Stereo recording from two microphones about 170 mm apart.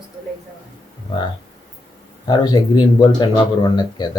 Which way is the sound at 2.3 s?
25° left (ahead or behind).